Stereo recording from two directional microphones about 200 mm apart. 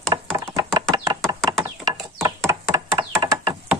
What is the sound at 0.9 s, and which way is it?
Knock, 15° right (ahead or behind).